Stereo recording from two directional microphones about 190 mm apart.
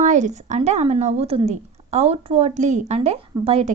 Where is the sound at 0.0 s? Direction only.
40° right (ahead or behind).